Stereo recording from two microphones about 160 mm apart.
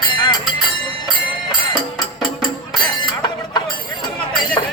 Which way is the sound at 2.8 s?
30° left (ahead or behind).